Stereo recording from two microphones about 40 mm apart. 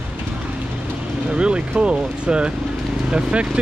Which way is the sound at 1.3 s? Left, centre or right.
Right.